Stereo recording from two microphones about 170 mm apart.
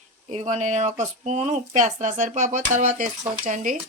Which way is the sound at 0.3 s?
40° right (ahead or behind).